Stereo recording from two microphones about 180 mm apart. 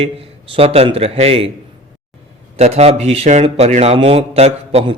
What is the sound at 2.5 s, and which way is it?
Speech, 35° right (ahead or behind).